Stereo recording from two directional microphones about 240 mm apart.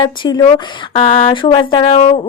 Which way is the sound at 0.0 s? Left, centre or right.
Centre.